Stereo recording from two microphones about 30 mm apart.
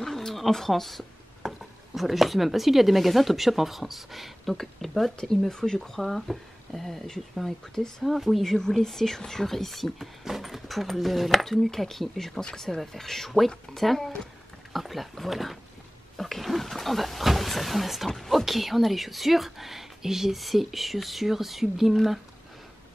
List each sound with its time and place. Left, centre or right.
0.0 s a sound: centre
1.4 s a sound: centre
2.0 s speech: centre
5.1 s speech: left
5.8 s speech: centre
7.4 s speech: centre
8.0 s speech: centre
8.5 s speech: centre
20.3 s speech: centre